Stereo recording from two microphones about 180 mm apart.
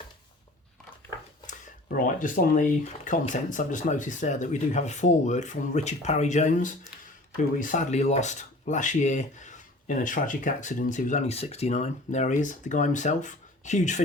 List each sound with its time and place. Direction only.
1.5 s speech: 50° left (ahead or behind)